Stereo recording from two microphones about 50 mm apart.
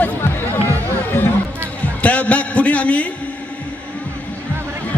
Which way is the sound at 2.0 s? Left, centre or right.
Left.